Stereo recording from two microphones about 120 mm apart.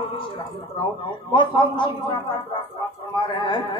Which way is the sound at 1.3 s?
40° left (ahead or behind).